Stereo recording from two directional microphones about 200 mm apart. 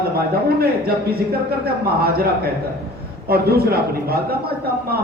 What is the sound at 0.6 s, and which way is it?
Speech, 50° right (ahead or behind).